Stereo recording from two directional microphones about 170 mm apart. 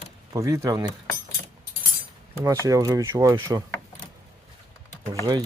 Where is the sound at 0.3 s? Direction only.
20° right (ahead or behind).